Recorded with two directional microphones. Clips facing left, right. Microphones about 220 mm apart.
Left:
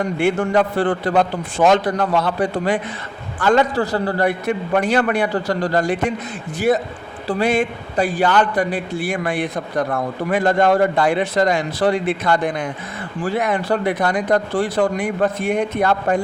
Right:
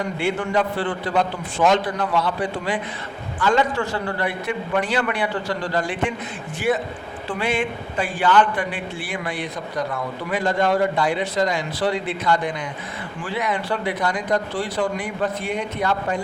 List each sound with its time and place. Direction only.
0.2 s a man's voice: 50° left (ahead or behind)
7.3 s a man's voice: 40° left (ahead or behind)